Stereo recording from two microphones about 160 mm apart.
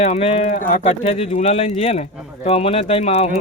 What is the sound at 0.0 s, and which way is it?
Speech, 40° left (ahead or behind).